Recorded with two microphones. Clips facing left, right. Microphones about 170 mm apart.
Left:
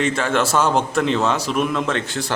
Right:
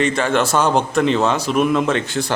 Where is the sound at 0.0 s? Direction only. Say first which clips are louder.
Right 2 dB; centre (ahead or behind).